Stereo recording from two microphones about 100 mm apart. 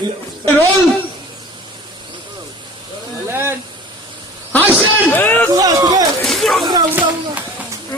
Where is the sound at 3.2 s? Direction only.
25° right (ahead or behind).